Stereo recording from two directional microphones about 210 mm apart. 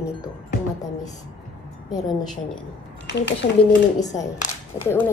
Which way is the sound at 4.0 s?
15° left (ahead or behind).